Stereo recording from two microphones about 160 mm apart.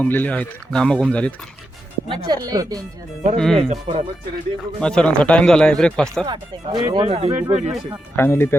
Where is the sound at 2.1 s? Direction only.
30° right (ahead or behind).